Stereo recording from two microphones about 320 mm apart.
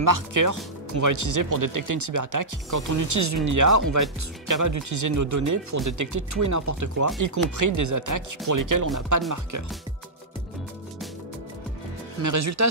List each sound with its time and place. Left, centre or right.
0.0 s speech: right
12.2 s speech: right